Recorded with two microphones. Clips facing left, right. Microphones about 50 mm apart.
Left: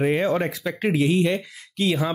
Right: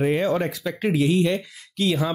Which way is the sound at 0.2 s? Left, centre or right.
Centre.